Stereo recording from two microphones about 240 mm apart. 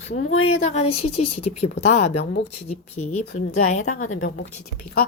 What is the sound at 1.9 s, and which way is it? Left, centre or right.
Speech, left.